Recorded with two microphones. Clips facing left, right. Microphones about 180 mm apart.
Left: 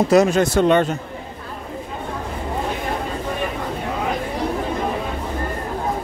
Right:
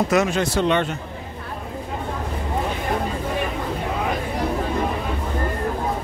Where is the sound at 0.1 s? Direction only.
40° left (ahead or behind).